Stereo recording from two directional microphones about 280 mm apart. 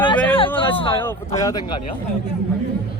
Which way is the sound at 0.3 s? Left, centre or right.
Centre.